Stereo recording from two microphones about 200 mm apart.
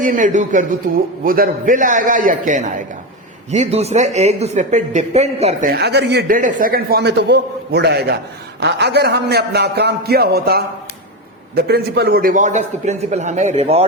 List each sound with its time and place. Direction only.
0.0 s a man's voice: 40° right (ahead or behind)